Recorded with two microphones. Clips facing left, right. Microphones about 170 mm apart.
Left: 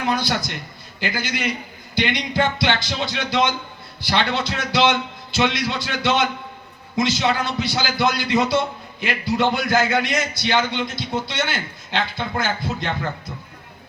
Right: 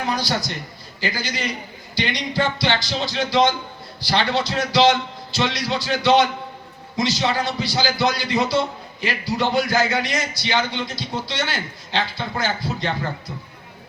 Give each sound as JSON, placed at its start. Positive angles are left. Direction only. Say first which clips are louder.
{"t": 0.1, "sound": "a man's voice", "louder": "left 2 dB", "side_deg": 55}